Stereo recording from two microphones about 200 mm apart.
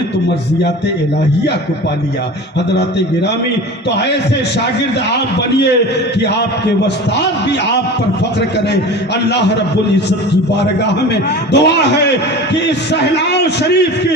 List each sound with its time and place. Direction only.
11.5 s a man's voice: 60° left (ahead or behind)